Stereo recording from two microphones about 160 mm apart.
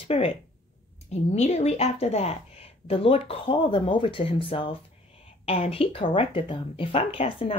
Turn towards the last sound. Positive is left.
turn(degrees=35)  # may be behind; listen again after turning